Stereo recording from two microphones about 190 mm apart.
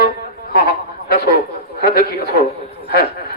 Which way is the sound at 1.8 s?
55° left (ahead or behind).